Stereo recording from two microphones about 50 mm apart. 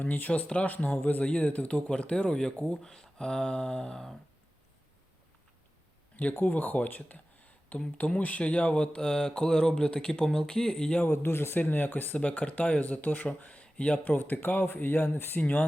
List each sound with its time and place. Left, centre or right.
0.0 s speech: left; by 4.1 s centre
6.4 s speech: left; by 11.0 s centre
11.0 s speech: left
11.6 s speech: left
15.4 s speech: left